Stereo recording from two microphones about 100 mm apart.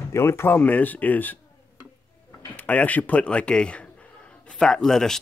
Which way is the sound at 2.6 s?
15° left (ahead or behind).